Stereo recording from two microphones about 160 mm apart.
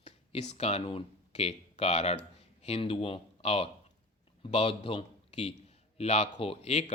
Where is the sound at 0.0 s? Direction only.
45° left (ahead or behind).